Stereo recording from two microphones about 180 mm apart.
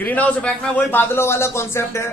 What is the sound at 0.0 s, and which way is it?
A man's voice, 10° left (ahead or behind).